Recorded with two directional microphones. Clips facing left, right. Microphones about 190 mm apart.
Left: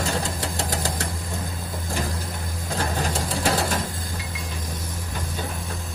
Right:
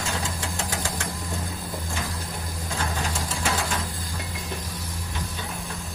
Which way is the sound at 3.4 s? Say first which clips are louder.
Left 4 dB; 35° left (ahead or behind).